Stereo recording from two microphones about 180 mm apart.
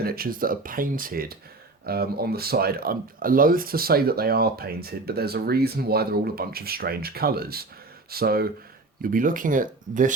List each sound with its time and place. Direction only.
0.0 s speech: 55° right (ahead or behind)